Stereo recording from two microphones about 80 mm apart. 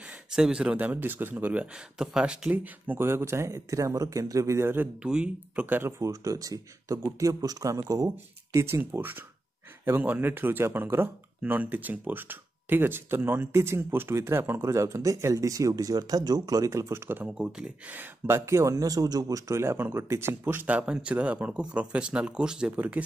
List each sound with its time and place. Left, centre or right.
0.3 s speech: centre
2.5 s speech: right
5.0 s speech: centre
5.7 s speech: right
8.5 s speech: right
17.3 s speech: centre